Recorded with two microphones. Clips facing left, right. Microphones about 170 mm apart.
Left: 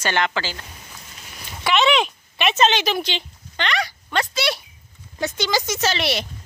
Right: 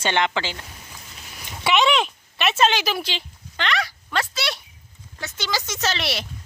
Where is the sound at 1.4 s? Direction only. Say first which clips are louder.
Even; 20° right (ahead or behind).